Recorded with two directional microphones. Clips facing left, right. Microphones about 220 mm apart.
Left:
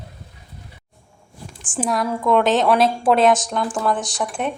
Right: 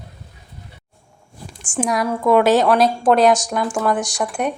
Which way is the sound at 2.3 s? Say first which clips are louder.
Right 3 dB; 5° right (ahead or behind).